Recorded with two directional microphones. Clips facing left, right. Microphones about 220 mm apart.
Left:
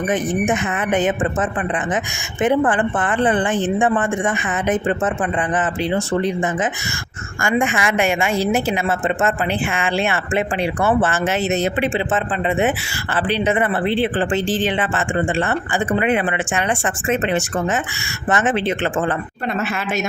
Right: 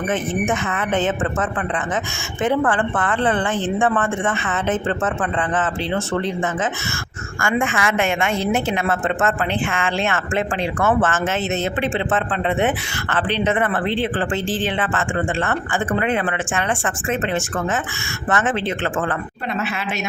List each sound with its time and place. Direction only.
0.1 s a woman's voice: 15° left (ahead or behind)
7.4 s a woman's voice: 15° left (ahead or behind)